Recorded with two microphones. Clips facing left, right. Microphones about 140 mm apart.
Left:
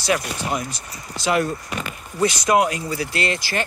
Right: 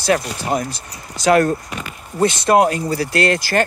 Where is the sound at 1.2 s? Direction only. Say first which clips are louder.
Right 7 dB; 45° right (ahead or behind).